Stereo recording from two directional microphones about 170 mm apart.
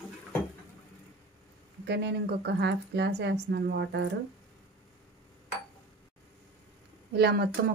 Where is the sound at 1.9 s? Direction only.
80° right.